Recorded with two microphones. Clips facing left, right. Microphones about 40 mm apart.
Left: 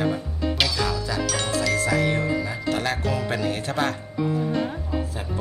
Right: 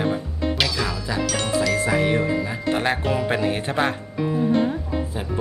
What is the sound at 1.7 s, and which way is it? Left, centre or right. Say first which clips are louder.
Speech: right 2 dB; right.